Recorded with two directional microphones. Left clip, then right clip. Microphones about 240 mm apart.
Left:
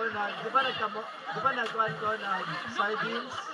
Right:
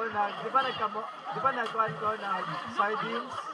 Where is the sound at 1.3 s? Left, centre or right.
Right.